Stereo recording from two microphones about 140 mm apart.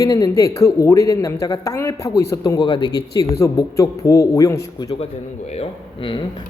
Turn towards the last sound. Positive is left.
turn(degrees=40)  # may be behind; listen again after turning